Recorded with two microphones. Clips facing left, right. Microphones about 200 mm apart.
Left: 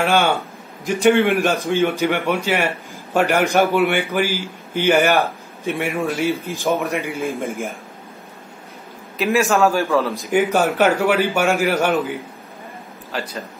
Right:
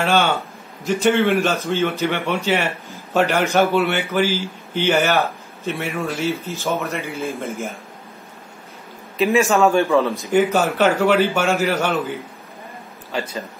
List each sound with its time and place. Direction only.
0.8 s a man's voice: 15° left (ahead or behind)
9.2 s a man's voice: centre (ahead or behind)
10.3 s a man's voice: 10° left (ahead or behind)
13.1 s a man's voice: centre (ahead or behind)